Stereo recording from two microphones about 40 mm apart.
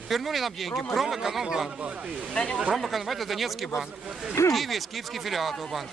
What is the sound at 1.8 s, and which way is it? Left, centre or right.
Speech, right.